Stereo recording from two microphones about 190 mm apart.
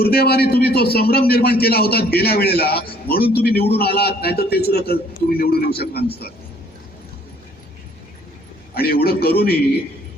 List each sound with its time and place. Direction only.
0.0 s a man's voice: 55° left (ahead or behind)
8.7 s a man's voice: 55° left (ahead or behind)